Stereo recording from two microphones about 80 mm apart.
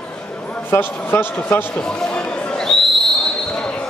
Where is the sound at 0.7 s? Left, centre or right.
Left.